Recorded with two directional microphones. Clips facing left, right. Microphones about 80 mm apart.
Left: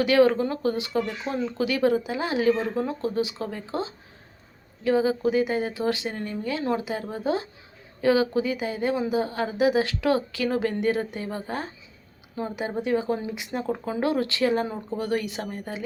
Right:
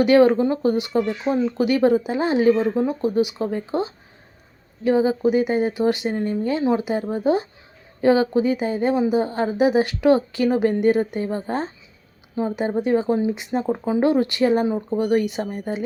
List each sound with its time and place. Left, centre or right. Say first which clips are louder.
0.0 s speech: right 5 dB; right
2.7 s speech: right 6 dB; centre